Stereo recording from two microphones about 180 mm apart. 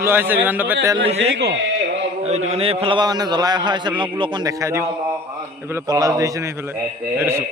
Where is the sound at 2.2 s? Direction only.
35° right (ahead or behind); by 7.4 s 15° right (ahead or behind).